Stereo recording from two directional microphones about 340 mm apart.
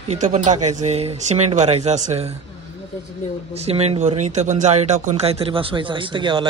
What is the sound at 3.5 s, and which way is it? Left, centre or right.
Speech, centre.